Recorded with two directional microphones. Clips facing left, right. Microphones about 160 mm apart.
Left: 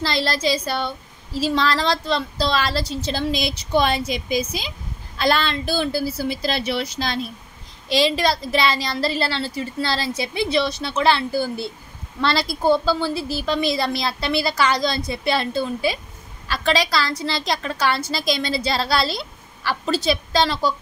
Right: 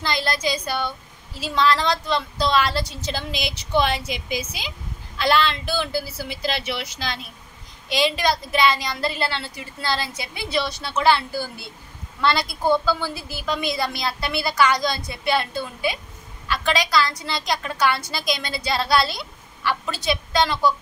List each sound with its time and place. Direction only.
0.0 s a woman's voice: 30° left (ahead or behind)